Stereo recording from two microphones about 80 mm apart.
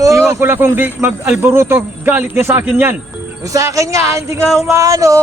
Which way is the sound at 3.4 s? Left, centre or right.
Right.